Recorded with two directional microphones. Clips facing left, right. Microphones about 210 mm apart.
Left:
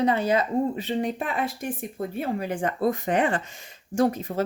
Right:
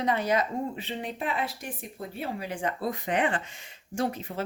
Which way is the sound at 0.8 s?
45° left (ahead or behind).